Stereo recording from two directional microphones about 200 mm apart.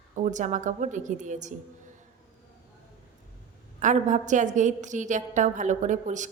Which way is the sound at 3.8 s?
40° right (ahead or behind).